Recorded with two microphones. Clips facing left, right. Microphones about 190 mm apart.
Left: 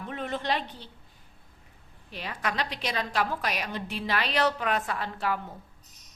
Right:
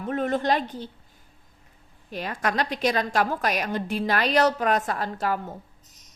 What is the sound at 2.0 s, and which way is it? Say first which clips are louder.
A woman's voice: right 5 dB; 45° right (ahead or behind).